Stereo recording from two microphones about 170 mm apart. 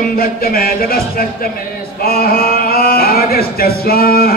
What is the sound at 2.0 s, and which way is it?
Male singing, 60° left (ahead or behind).